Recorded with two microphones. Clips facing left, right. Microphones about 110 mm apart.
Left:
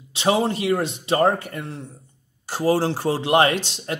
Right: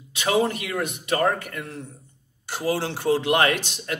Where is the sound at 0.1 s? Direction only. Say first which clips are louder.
Left 2 dB; 30° left (ahead or behind).